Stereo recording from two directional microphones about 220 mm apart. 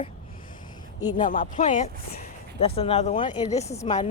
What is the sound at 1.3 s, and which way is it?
Speech, 35° left (ahead or behind).